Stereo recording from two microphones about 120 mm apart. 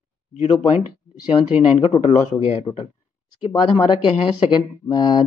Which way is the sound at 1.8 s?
55° left (ahead or behind).